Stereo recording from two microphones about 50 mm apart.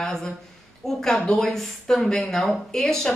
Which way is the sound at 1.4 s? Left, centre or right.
Centre.